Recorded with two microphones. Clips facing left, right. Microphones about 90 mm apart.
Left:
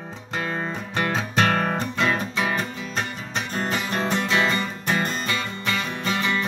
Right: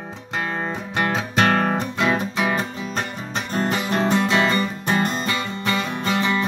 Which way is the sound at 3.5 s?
25° right (ahead or behind).